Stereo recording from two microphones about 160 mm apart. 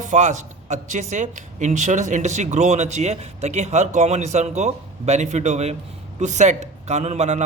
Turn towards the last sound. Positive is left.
turn(degrees=-45)  # may be behind; listen again after turning